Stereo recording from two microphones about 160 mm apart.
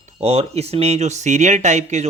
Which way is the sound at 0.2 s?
40° right (ahead or behind).